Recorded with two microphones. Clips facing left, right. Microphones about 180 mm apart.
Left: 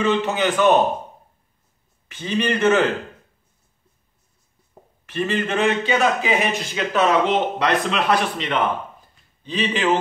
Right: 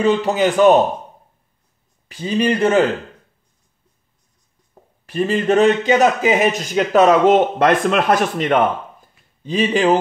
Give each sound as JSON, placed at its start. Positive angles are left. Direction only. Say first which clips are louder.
{"t": 0.0, "sound": "speech", "louder": "right 4 dB", "side_deg": -35}
{"t": 2.0, "sound": "speech", "louder": "right 4 dB", "side_deg": -35}
{"t": 5.0, "sound": "a man's voice", "louder": "right 5 dB", "side_deg": -35}